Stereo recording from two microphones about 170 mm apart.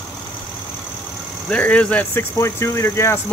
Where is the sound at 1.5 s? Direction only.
5° left (ahead or behind).